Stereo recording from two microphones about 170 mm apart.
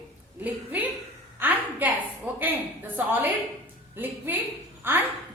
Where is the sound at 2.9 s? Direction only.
10° right (ahead or behind).